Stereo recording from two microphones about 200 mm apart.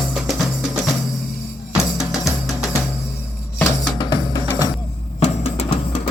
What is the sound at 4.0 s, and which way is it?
Music, 25° left (ahead or behind).